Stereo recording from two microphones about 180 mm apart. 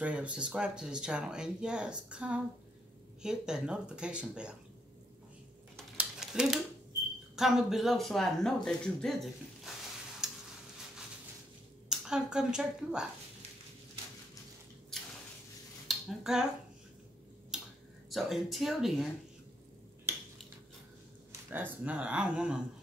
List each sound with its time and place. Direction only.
0.0 s speech: 5° right (ahead or behind)
5.9 s a sound: 5° right (ahead or behind)
7.3 s speech: centre (ahead or behind)
10.2 s a sound: 5° right (ahead or behind)
11.9 s a woman's voice: 5° right (ahead or behind)
15.9 s dishes: centre (ahead or behind)
17.5 s a sound: 5° right (ahead or behind)
18.1 s speech: centre (ahead or behind)
21.5 s speech: 10° right (ahead or behind)